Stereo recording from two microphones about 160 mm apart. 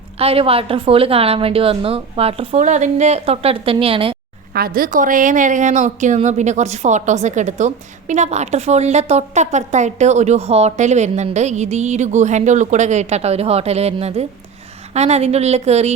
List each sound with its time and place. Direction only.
0.2 s a woman's voice: 35° right (ahead or behind)
4.5 s a woman's voice: 65° right (ahead or behind); by 15.9 s 45° right (ahead or behind)